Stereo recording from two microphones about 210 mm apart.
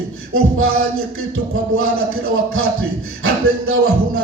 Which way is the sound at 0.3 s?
85° right.